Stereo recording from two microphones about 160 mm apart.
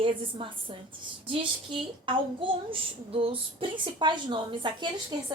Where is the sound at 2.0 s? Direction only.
35° right (ahead or behind).